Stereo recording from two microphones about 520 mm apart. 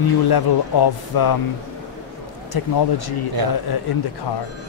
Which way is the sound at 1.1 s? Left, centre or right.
Left.